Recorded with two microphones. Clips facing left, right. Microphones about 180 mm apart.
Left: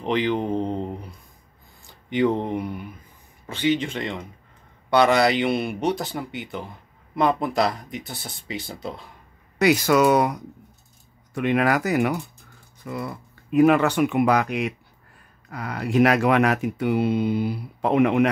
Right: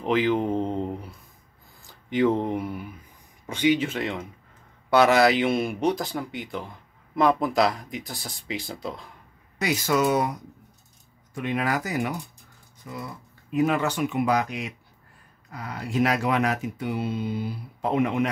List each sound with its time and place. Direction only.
0.0 s mantra: 5° right (ahead or behind)
1.9 s speech: centre (ahead or behind)
9.6 s speech: 70° left (ahead or behind)
11.3 s speech: 65° left (ahead or behind)